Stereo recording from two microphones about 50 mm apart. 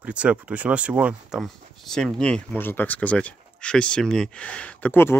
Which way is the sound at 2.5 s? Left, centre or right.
Left.